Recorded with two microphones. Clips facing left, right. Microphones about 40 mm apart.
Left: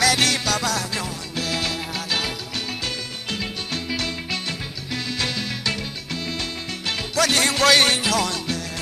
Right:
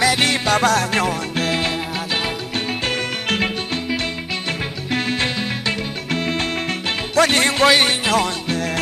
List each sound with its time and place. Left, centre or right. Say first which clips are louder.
0.0 s music: right 3 dB; right
0.6 s music: right 8 dB; right
3.3 s music: right 8 dB; right
3.7 s music: right 4 dB; right
4.9 s music: right 5 dB; right
6.1 s music: right 8 dB; right
7.7 s music: right 1 dB; centre
8.0 s music: right 4 dB; right